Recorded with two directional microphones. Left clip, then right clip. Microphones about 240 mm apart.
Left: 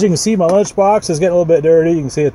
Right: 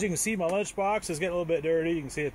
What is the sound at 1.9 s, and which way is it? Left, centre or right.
Speech, centre.